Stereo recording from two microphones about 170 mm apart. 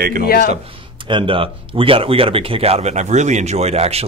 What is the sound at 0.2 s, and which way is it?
Speech, 65° left (ahead or behind).